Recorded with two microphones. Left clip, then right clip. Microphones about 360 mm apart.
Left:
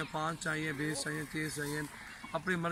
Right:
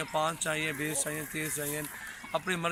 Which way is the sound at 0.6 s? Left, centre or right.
Right.